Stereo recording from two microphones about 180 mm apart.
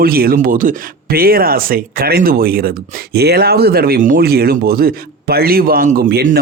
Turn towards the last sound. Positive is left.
turn(degrees=-50)  # may be behind; listen again after turning